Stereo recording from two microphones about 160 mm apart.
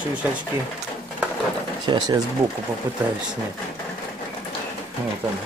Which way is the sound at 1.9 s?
30° right (ahead or behind).